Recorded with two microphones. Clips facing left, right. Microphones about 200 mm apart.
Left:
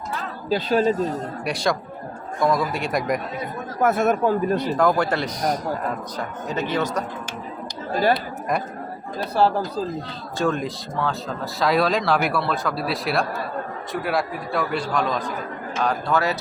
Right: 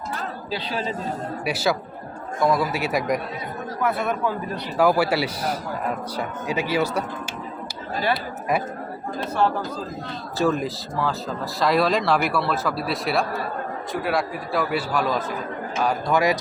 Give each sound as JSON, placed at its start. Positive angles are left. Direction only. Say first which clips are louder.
{"t": 0.5, "sound": "speech", "louder": "left 10 dB", "side_deg": 45}
{"t": 1.5, "sound": "speech", "louder": "right 1 dB", "side_deg": -5}
{"t": 3.8, "sound": "speech", "louder": "left 5 dB", "side_deg": 45}
{"t": 4.8, "sound": "speech", "louder": "right 5 dB", "side_deg": -10}
{"t": 8.1, "sound": "speech", "louder": "even", "side_deg": -5}
{"t": 9.4, "sound": "speech", "louder": "left 3 dB", "side_deg": 35}
{"t": 10.3, "sound": "speech", "louder": "right 1 dB", "side_deg": -5}